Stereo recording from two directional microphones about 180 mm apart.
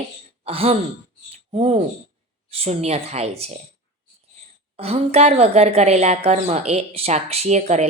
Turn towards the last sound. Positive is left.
turn(degrees=-40)  # may be behind; listen again after turning